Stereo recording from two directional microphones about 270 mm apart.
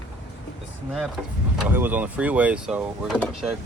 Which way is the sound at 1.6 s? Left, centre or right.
Centre.